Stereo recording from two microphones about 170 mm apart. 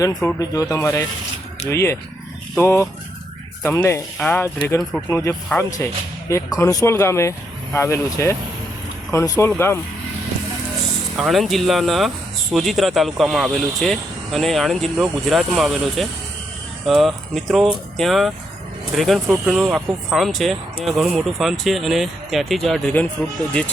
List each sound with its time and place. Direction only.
0.0 s speech: 20° left (ahead or behind)
11.2 s speech: centre (ahead or behind)